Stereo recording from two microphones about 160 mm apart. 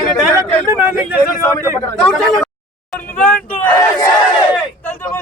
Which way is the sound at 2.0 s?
5° left (ahead or behind).